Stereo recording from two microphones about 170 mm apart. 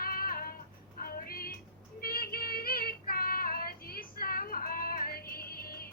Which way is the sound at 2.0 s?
60° left (ahead or behind).